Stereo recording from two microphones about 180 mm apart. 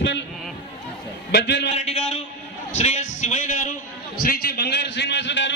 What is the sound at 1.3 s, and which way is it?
Speech, 70° left (ahead or behind).